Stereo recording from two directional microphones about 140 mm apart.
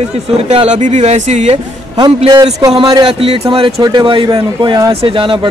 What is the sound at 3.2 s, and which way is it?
A man's voice, 40° right (ahead or behind).